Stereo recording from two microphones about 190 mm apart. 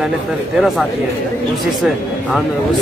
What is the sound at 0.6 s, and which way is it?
Speech, centre (ahead or behind).